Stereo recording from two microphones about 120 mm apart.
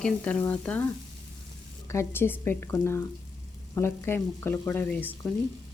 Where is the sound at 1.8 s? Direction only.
25° left (ahead or behind).